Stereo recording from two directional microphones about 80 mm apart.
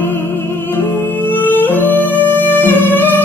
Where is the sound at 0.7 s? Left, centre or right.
Left.